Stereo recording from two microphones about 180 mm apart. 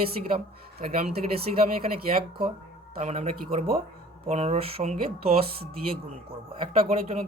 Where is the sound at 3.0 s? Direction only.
40° right (ahead or behind).